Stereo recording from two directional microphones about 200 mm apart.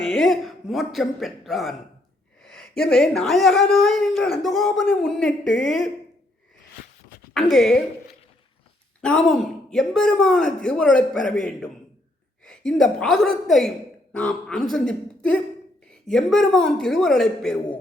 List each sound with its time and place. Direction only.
0.0 s a sound: centre (ahead or behind)
0.9 s speech: centre (ahead or behind)
7.3 s speech: centre (ahead or behind)
9.0 s a woman's voice: 5° left (ahead or behind)